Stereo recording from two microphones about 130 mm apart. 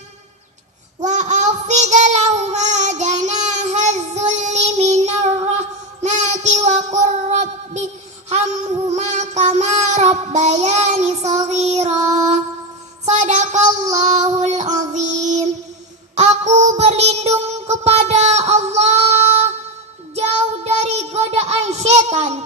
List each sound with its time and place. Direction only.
1.0 s child singing: 65° right (ahead or behind)
13.1 s child singing: 60° right (ahead or behind)